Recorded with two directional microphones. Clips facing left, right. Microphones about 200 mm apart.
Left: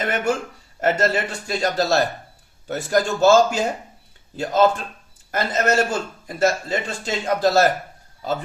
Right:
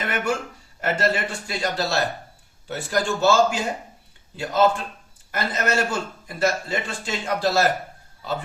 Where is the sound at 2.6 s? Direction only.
45° left (ahead or behind).